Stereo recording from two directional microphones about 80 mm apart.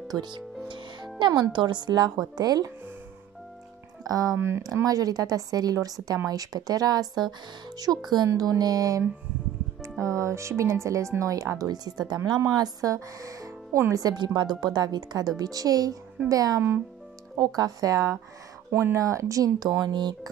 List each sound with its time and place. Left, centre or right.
0.1 s speech: right
4.0 s speech: right
4.4 s speech: right
4.8 s speech: right
7.9 s speech: centre
8.3 s speech: right
14.0 s speech: right
18.7 s speech: right